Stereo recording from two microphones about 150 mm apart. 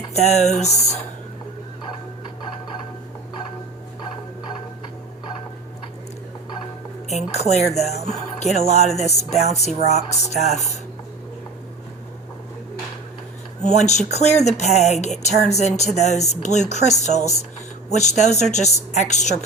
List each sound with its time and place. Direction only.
0.1 s speech: 50° left (ahead or behind)
7.1 s speech: 50° left (ahead or behind)
13.7 s speech: 50° left (ahead or behind)